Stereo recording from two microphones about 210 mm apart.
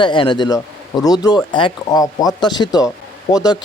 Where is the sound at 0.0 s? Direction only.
20° left (ahead or behind).